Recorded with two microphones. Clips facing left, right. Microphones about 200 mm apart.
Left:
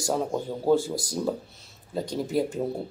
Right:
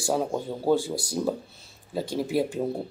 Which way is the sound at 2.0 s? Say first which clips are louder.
Right 1 dB; 25° right (ahead or behind).